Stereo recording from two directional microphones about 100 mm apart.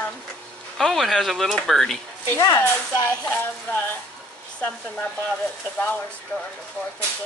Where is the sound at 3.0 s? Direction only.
15° left (ahead or behind).